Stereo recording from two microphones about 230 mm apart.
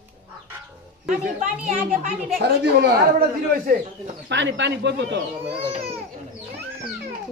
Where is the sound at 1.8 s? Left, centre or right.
Right.